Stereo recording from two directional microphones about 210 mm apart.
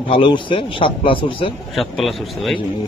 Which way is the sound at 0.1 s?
25° left (ahead or behind).